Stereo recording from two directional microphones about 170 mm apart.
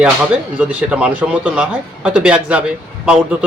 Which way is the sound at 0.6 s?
5° right (ahead or behind).